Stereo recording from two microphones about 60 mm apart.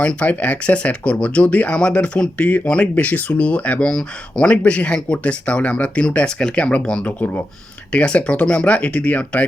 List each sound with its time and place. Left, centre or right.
0.0 s speech: left